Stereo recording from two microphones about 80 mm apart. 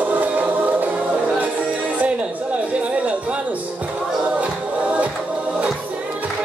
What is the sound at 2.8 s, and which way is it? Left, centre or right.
Music, centre.